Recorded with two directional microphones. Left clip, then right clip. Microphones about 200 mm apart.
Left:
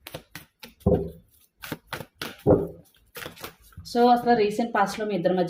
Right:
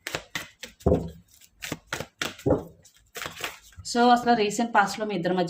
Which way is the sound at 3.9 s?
25° right (ahead or behind).